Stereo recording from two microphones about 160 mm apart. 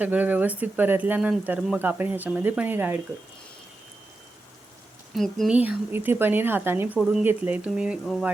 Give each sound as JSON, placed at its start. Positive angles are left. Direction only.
{"t": 0.0, "sound": "speech", "side_deg": -10}
{"t": 5.1, "sound": "speech", "side_deg": 0}
{"t": 5.5, "sound": "speech", "side_deg": -10}